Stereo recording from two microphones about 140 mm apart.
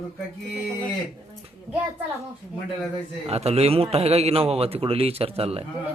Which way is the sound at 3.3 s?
45° right (ahead or behind).